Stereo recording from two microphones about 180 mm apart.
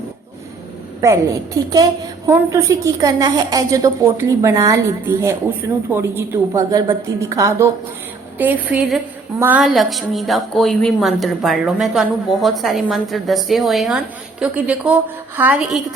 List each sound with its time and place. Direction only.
1.0 s a woman's voice: 15° right (ahead or behind)